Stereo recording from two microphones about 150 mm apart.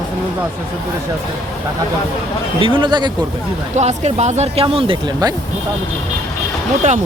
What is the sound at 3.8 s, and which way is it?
Speech, 45° right (ahead or behind).